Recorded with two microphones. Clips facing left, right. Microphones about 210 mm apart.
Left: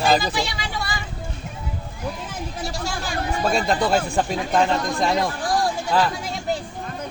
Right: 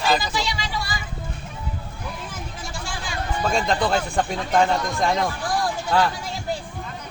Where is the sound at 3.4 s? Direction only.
5° left (ahead or behind).